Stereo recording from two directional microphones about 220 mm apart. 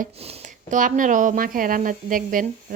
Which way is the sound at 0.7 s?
35° right (ahead or behind).